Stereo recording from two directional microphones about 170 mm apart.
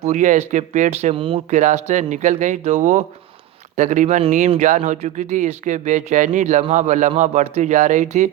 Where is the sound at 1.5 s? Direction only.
45° right (ahead or behind).